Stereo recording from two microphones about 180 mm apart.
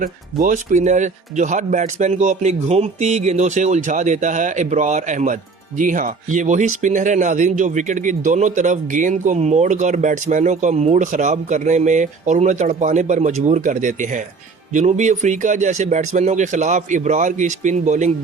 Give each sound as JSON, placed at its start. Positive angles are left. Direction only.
{"t": 0.0, "sound": "speech", "side_deg": -50}